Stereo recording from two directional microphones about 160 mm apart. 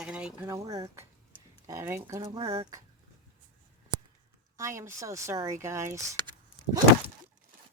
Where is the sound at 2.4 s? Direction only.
35° right (ahead or behind).